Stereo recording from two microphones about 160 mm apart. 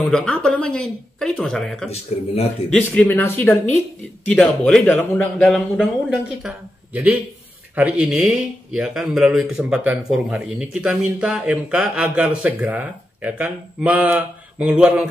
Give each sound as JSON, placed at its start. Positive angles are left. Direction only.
{"t": 0.1, "sound": "speech", "side_deg": 5}
{"t": 1.9, "sound": "a man's voice", "side_deg": 40}
{"t": 2.7, "sound": "speech", "side_deg": 10}